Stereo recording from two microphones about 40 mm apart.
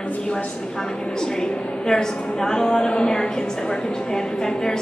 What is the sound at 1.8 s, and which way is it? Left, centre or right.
A woman's voice, centre.